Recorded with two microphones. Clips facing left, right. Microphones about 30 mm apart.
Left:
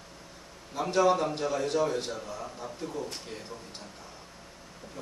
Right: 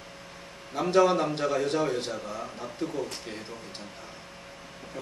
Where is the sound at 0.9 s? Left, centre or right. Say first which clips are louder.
Right 2 dB; right.